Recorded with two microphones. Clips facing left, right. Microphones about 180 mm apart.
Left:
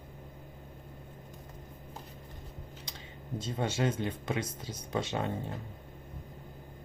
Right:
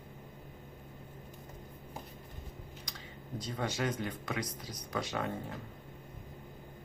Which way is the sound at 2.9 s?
25° left (ahead or behind).